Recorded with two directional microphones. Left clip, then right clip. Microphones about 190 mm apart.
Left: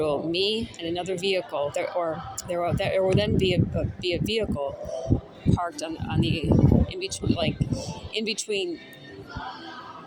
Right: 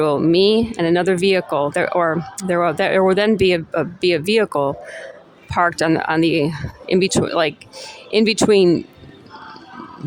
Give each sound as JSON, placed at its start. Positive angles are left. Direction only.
{"t": 0.0, "sound": "speech", "side_deg": -35}